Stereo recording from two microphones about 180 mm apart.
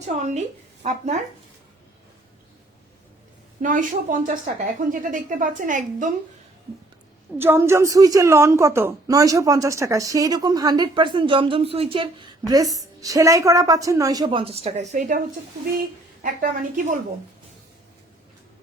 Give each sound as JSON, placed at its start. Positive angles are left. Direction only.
{"t": 0.2, "sound": "speech", "side_deg": -40}
{"t": 3.6, "sound": "a woman's voice", "side_deg": -45}
{"t": 7.3, "sound": "a woman's voice", "side_deg": -15}
{"t": 16.2, "sound": "a woman's voice", "side_deg": -50}